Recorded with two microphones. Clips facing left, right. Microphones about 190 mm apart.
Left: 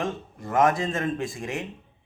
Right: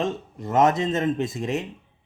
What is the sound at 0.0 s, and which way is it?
A man's voice, 25° right (ahead or behind).